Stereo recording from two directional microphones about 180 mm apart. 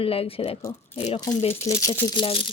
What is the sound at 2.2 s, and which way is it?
Speech, 30° left (ahead or behind).